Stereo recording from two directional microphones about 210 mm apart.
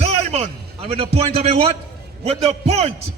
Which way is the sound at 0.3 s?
30° right (ahead or behind).